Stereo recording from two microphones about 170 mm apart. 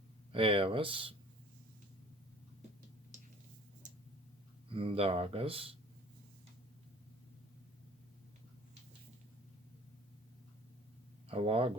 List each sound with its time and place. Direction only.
0.3 s speech: 30° right (ahead or behind)
3.8 s tick-tock: 50° right (ahead or behind)
4.7 s speech: 30° right (ahead or behind)
11.3 s speech: 35° right (ahead or behind)